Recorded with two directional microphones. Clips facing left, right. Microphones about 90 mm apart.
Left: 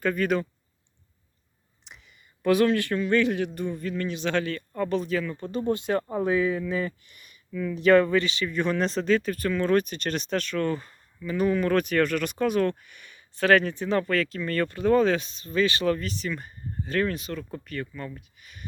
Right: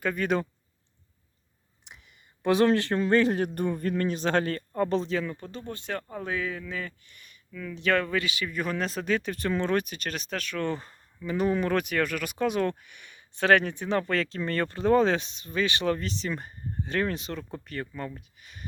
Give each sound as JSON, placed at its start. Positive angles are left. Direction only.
{"t": 0.0, "sound": "speech", "side_deg": -15}
{"t": 2.0, "sound": "a sound", "side_deg": -20}
{"t": 2.6, "sound": "speech", "side_deg": -30}
{"t": 3.5, "sound": "speech", "side_deg": -50}
{"t": 4.7, "sound": "speech", "side_deg": -25}
{"t": 5.5, "sound": "speech", "side_deg": 15}
{"t": 6.2, "sound": "speech", "side_deg": 10}
{"t": 10.6, "sound": "speech", "side_deg": -25}